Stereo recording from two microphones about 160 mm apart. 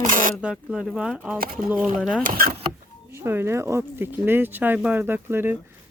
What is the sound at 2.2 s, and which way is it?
Speech, 60° right (ahead or behind).